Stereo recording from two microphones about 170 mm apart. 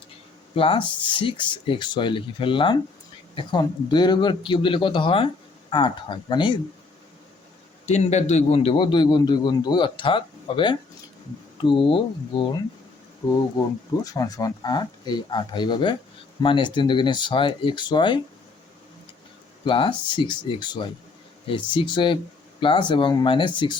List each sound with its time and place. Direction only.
0.5 s a man's voice: 35° left (ahead or behind)
7.9 s a man's voice: 40° left (ahead or behind)
14.0 s a man's voice: 20° left (ahead or behind)
19.6 s a man's voice: 30° left (ahead or behind)